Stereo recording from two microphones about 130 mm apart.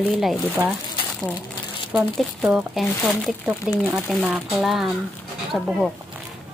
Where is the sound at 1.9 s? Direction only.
5° right (ahead or behind).